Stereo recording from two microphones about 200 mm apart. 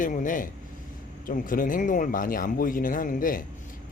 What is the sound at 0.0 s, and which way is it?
A man's voice, 40° left (ahead or behind).